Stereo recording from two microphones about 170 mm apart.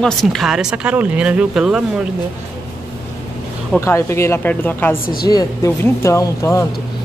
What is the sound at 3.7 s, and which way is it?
Speech, 15° left (ahead or behind).